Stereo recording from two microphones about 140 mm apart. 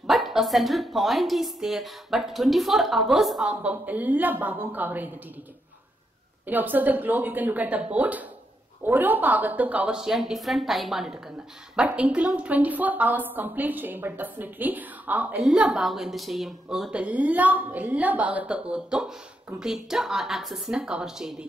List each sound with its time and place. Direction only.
0.0 s a woman's voice: centre (ahead or behind)
6.4 s a woman's voice: 15° right (ahead or behind)